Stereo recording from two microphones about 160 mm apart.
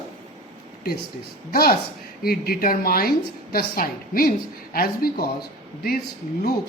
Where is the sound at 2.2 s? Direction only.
70° left (ahead or behind).